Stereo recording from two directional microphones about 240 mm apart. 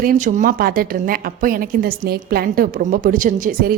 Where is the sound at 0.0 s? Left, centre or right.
Right.